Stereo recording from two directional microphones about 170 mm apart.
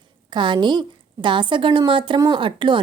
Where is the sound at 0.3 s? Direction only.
30° right (ahead or behind).